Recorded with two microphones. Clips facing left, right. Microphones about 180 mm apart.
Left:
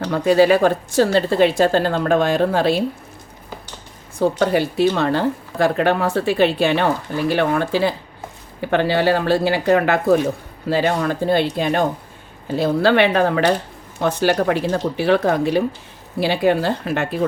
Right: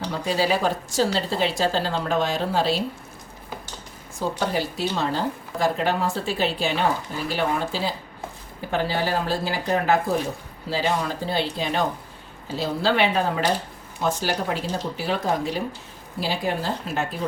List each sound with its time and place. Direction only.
0.0 s a woman's voice: 60° left (ahead or behind)
4.2 s a woman's voice: 60° left (ahead or behind)
10.7 s a woman's voice: 60° left (ahead or behind)